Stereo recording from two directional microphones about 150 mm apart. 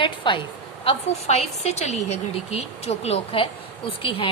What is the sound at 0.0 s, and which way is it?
Speech, 35° left (ahead or behind).